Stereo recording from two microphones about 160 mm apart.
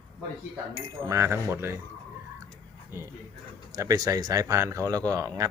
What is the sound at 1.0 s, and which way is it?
Speech, 15° right (ahead or behind).